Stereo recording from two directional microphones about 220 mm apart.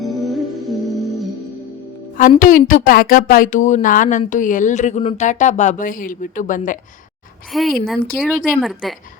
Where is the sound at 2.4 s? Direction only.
35° left (ahead or behind).